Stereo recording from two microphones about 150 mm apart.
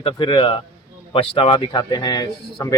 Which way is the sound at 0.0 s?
35° left (ahead or behind).